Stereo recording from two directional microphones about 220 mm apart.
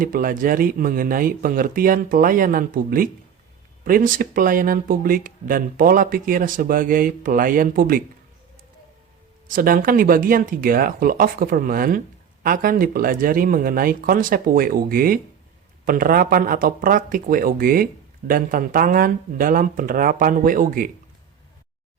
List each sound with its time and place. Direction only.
0.0 s speech: 40° right (ahead or behind)
9.5 s speech: 40° right (ahead or behind)